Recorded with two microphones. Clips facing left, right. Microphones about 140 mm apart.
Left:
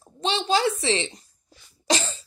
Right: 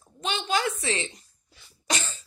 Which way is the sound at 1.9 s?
30° left (ahead or behind).